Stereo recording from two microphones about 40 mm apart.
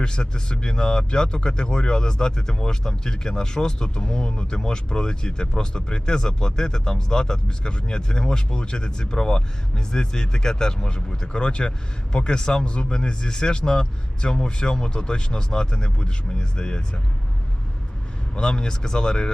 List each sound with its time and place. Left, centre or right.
0.0 s speech: left
18.3 s speech: left